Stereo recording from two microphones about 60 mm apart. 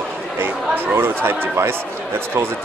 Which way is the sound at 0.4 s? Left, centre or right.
Right.